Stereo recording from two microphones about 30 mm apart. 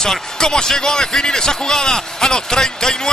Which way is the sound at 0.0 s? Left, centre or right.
Left.